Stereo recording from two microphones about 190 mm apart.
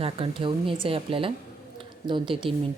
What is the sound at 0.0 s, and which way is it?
Speech, 30° right (ahead or behind).